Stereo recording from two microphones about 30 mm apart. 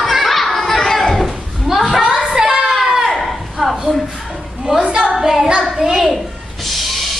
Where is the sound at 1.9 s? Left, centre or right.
Right.